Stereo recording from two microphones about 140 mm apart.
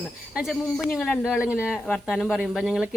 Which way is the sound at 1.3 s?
5° right (ahead or behind).